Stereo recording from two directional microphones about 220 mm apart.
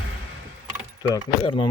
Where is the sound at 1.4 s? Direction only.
20° left (ahead or behind).